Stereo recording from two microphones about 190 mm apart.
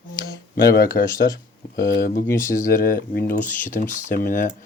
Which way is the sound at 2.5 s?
45° left (ahead or behind).